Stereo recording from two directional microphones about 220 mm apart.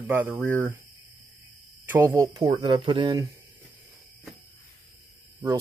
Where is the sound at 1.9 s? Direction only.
15° right (ahead or behind).